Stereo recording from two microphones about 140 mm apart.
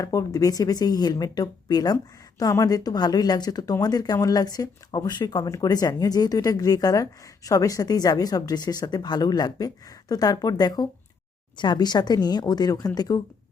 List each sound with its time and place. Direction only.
0.0 s speech: 25° left (ahead or behind)